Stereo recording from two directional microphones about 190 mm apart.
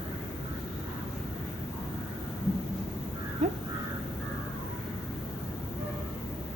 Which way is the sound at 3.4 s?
35° right (ahead or behind).